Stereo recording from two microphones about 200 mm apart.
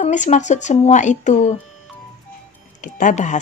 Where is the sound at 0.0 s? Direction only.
35° left (ahead or behind).